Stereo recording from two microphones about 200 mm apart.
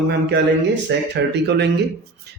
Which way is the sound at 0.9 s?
60° right (ahead or behind).